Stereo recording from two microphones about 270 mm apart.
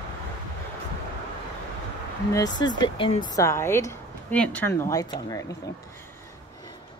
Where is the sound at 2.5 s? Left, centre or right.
Centre.